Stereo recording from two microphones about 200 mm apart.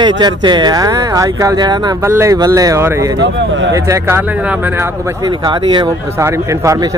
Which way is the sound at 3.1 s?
65° right (ahead or behind).